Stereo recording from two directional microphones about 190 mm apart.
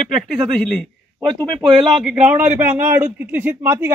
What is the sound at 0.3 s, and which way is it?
Speech, 5° left (ahead or behind).